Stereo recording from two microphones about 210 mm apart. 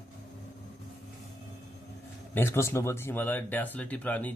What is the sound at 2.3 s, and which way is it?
Speech, 10° left (ahead or behind).